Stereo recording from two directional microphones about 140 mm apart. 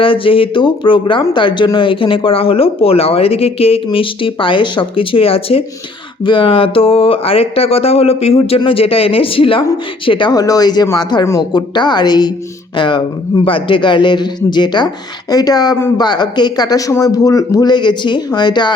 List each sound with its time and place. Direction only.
0.0 s speech: 40° left (ahead or behind)